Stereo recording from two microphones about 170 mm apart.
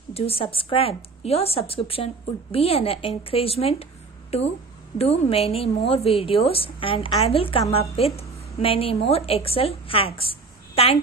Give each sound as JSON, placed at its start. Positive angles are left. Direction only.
{"t": 0.1, "sound": "a woman's voice", "side_deg": 35}